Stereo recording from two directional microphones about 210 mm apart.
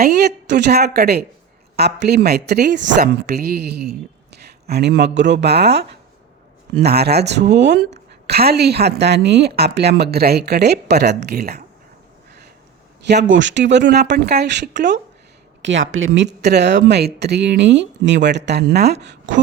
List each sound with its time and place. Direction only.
0.0 s a woman's voice: 50° right (ahead or behind)
6.8 s a woman's voice: 50° right (ahead or behind)
13.3 s speech: 60° right (ahead or behind)